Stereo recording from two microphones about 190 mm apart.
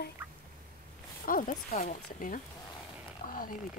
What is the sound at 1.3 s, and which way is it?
Speech, 45° left (ahead or behind).